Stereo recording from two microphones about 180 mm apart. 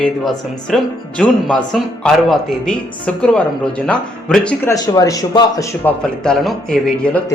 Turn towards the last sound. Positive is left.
turn(degrees=5)  # may be behind; listen again after turning